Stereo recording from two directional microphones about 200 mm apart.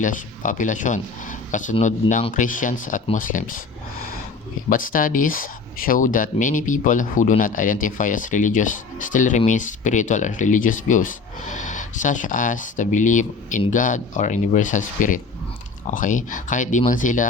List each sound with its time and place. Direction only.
0.0 s speech: 40° left (ahead or behind)
4.7 s speech: 45° left (ahead or behind)